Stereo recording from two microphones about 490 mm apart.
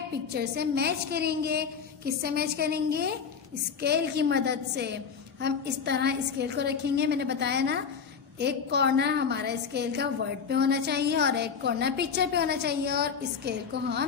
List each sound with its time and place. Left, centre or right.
0.3 s a woman's voice: centre